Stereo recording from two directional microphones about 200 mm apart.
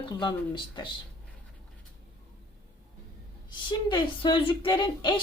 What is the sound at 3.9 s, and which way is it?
Speech, 25° left (ahead or behind).